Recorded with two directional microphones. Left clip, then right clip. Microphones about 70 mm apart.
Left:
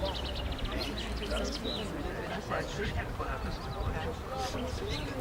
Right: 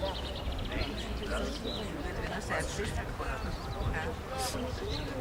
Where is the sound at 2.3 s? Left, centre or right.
Right.